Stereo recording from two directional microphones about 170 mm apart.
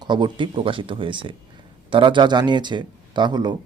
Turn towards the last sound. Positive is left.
turn(degrees=-25)  # may be behind; listen again after turning